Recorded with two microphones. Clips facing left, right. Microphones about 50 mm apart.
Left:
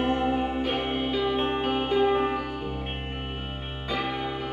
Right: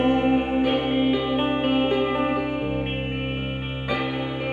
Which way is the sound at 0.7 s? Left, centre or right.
Centre.